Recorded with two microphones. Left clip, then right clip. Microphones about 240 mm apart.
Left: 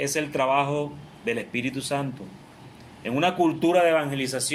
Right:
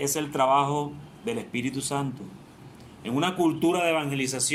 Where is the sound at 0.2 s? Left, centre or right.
Right.